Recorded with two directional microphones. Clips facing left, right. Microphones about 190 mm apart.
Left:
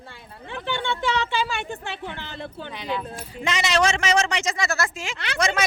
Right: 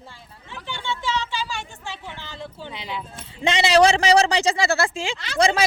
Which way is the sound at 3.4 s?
30° right (ahead or behind).